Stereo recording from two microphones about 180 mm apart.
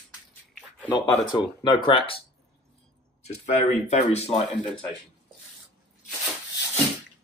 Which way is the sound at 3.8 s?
35° left (ahead or behind).